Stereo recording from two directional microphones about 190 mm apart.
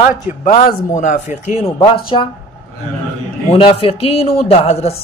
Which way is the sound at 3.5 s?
30° left (ahead or behind).